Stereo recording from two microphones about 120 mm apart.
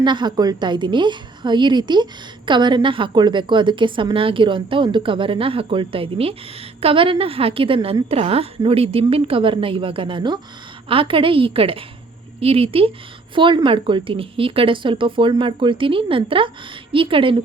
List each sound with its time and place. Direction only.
0.0 s a woman's voice: 40° right (ahead or behind)